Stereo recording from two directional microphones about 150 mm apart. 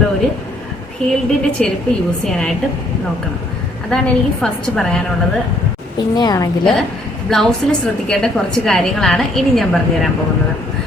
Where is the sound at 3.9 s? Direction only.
5° left (ahead or behind).